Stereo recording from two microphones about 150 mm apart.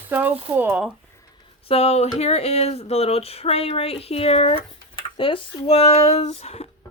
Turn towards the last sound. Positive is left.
turn(degrees=45)  # may be behind; listen again after turning